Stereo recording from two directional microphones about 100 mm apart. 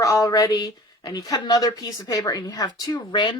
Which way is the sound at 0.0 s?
35° left (ahead or behind).